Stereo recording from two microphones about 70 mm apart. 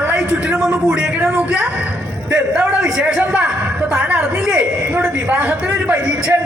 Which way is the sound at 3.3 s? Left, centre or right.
Centre.